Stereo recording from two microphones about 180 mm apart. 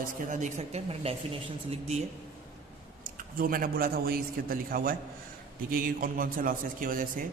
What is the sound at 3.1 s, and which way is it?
A man's voice, 50° right (ahead or behind).